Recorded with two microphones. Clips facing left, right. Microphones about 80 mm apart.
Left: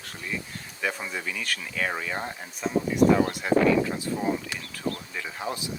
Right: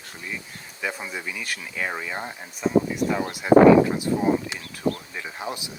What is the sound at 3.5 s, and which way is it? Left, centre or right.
Speech, right.